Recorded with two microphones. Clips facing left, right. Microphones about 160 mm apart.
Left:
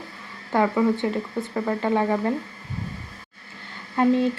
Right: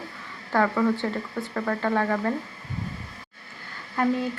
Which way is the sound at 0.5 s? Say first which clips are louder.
Left 2 dB; 15° left (ahead or behind).